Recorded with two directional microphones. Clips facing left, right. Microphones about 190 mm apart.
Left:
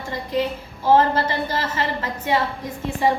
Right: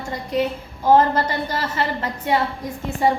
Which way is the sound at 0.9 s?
40° right (ahead or behind).